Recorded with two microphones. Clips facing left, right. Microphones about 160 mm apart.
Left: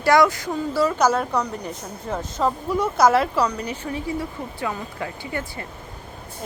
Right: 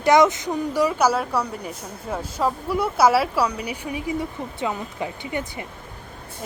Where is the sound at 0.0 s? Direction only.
20° right (ahead or behind).